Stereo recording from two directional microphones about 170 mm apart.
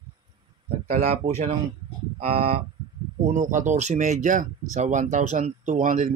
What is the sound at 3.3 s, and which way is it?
Speech, 50° right (ahead or behind).